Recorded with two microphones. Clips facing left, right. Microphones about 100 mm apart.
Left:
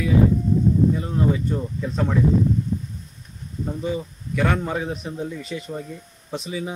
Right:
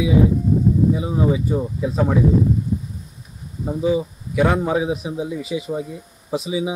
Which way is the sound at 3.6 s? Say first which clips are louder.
Right 7 dB; 5° right (ahead or behind).